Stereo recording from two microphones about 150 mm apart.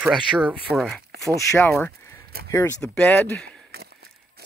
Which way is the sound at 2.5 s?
20° left (ahead or behind).